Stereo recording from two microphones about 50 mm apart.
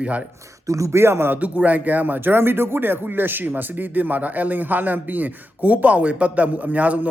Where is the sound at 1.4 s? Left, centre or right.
Right.